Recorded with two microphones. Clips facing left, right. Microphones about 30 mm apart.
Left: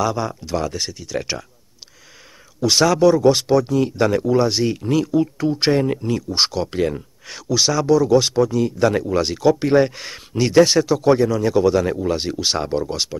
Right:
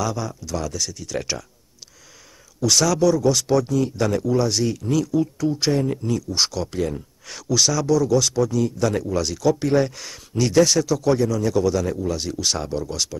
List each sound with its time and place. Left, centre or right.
0.0 s speech: left
0.9 s speech: centre
2.6 s speech: left
3.4 s speech: centre
3.7 s speech: left
7.2 s speech: centre